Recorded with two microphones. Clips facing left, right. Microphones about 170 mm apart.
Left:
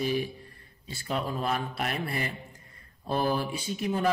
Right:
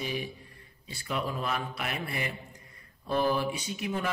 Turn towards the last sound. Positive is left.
turn(degrees=35)  # may be behind; listen again after turning